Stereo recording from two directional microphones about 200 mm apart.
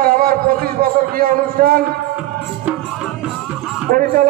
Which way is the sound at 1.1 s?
45° right (ahead or behind).